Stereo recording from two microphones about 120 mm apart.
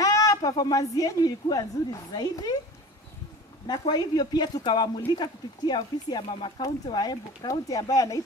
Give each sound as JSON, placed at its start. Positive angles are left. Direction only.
{"t": 0.0, "sound": "speech", "side_deg": 30}
{"t": 3.9, "sound": "speech", "side_deg": 35}